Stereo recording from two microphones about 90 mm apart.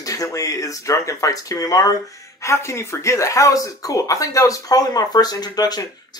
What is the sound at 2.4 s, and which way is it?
Speech, 30° left (ahead or behind).